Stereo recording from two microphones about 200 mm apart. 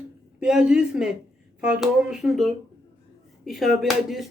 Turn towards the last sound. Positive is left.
turn(degrees=0)  # may be behind; listen again after turning